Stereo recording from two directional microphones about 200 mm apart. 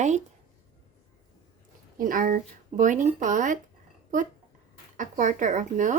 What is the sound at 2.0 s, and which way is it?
Speech, 45° right (ahead or behind).